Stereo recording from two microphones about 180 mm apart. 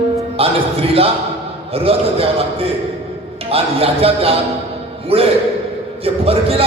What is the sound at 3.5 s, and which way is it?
A man's voice, 35° right (ahead or behind).